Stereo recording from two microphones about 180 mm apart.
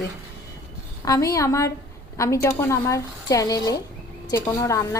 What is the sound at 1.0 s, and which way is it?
A woman's voice, 20° left (ahead or behind).